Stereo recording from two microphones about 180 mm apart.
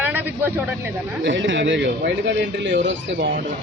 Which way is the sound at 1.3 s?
90° right.